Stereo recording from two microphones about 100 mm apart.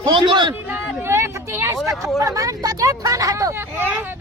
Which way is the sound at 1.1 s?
25° right (ahead or behind).